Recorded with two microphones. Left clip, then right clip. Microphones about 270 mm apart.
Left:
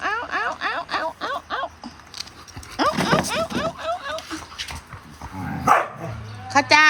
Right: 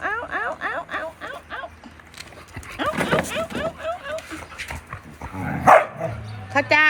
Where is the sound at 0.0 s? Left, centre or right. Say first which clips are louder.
Left 1 dB; centre.